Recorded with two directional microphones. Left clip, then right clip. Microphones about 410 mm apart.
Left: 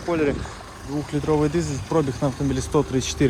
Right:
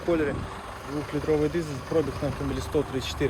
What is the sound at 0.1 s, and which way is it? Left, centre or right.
Speech, centre.